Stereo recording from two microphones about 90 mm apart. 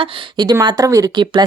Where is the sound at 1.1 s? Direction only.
55° right (ahead or behind).